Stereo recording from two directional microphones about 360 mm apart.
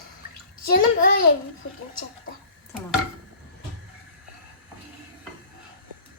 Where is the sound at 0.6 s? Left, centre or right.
Left.